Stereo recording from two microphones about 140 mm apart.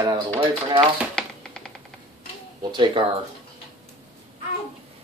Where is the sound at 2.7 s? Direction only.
35° right (ahead or behind).